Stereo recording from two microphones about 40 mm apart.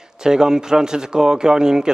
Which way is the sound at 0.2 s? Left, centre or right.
Centre.